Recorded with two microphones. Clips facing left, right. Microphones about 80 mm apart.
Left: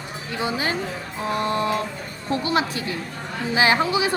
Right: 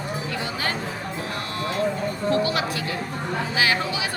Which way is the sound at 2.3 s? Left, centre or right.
Left.